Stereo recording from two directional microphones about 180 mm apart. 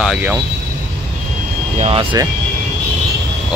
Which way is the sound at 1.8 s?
30° right (ahead or behind).